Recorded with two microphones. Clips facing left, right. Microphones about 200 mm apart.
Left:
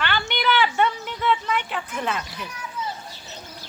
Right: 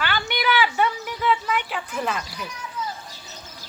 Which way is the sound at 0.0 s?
10° right (ahead or behind).